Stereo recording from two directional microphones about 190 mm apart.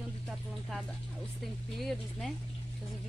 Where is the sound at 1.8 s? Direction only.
Centre (ahead or behind).